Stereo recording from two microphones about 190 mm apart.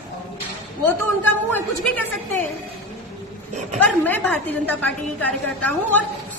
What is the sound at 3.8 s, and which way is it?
A woman's voice, 10° left (ahead or behind).